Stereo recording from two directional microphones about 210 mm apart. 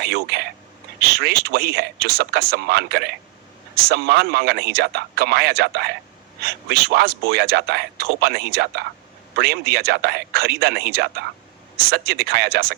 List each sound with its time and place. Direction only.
0.0 s a man's voice: 50° right (ahead or behind)